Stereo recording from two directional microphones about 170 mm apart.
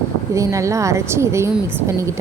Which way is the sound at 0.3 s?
20° right (ahead or behind).